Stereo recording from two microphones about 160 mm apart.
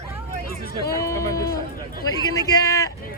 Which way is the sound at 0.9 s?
20° left (ahead or behind).